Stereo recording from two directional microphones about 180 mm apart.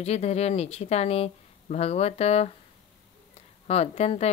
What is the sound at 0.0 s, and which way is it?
A woman's voice, 35° left (ahead or behind).